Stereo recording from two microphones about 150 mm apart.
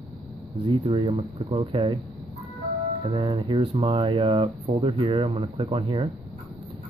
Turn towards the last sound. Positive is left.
turn(degrees=-35)  # may be behind; listen again after turning